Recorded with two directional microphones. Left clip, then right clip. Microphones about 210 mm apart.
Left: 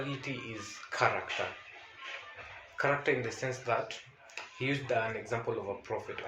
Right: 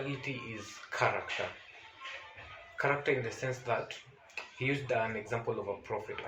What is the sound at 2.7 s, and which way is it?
Speech, 25° left (ahead or behind).